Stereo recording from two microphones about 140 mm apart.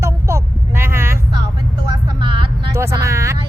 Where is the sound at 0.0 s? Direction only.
20° right (ahead or behind).